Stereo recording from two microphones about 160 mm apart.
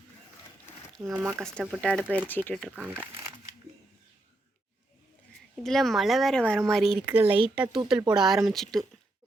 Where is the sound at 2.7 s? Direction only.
10° right (ahead or behind).